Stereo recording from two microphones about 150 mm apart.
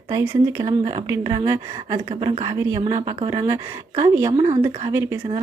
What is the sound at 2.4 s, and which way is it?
Speech, 20° right (ahead or behind).